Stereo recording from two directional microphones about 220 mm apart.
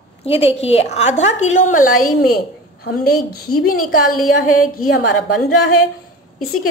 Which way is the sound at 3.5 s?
45° left (ahead or behind).